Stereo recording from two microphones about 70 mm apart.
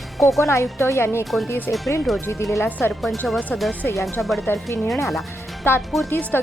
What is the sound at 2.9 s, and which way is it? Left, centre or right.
Speech, centre.